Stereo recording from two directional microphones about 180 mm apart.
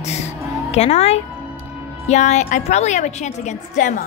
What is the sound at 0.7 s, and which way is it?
A woman's voice, 35° left (ahead or behind).